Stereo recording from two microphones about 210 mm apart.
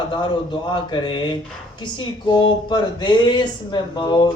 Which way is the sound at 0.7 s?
20° left (ahead or behind).